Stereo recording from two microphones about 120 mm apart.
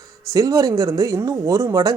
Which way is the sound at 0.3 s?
30° right (ahead or behind).